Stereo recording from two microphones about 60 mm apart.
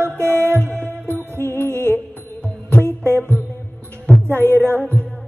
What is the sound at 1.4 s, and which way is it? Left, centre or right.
Music, left.